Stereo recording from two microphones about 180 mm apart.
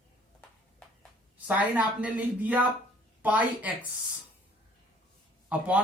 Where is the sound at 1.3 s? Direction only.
10° right (ahead or behind).